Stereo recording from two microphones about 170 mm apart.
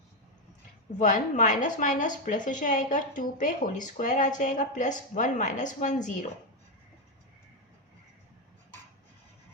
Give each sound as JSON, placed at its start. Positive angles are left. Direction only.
{"t": 0.9, "sound": "a woman's voice", "side_deg": 50}